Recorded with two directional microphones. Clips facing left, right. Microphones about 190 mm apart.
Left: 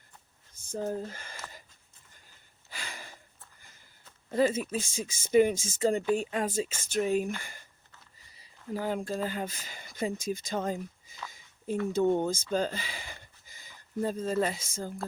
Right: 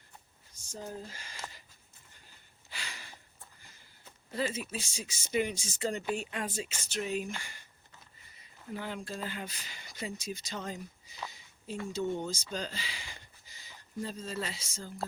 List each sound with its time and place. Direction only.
0.7 s speech: 50° left (ahead or behind)
2.7 s sniff: 50° left (ahead or behind)
4.3 s speech: 45° left (ahead or behind)
8.7 s speech: 40° left (ahead or behind)
11.3 s a sound: 50° left (ahead or behind)
11.9 s speech: 55° left (ahead or behind)